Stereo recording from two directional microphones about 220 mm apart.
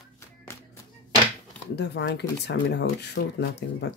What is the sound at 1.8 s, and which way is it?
Speech, 55° left (ahead or behind).